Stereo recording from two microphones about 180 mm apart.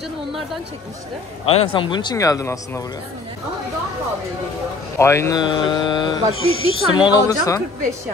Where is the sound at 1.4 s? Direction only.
35° left (ahead or behind); by 2.8 s 15° left (ahead or behind).